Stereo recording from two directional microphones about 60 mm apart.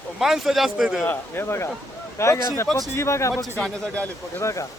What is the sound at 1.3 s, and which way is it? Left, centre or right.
Speech, left.